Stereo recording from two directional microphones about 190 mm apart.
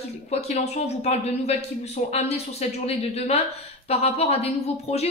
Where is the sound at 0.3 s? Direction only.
35° left (ahead or behind).